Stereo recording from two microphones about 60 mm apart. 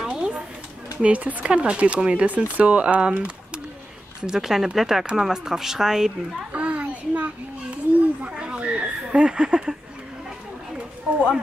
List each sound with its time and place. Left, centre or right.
0.0 s a sound: centre
1.0 s speech: right
4.3 s speech: centre
6.5 s children playing: right